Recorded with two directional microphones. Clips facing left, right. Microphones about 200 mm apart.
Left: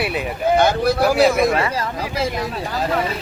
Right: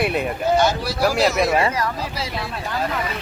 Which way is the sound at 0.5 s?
55° left (ahead or behind).